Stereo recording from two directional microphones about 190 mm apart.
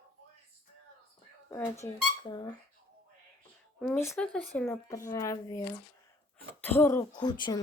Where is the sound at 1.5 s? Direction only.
15° left (ahead or behind).